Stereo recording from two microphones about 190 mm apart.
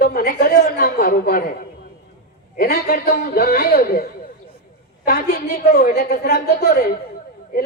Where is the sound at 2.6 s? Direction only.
55° left (ahead or behind).